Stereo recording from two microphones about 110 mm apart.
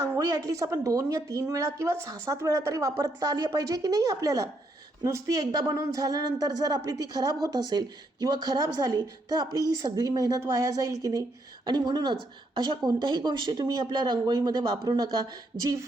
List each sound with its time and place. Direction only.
0.2 s a woman's voice: 30° right (ahead or behind)